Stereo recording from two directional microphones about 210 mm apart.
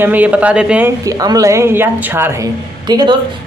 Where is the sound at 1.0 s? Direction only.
15° right (ahead or behind).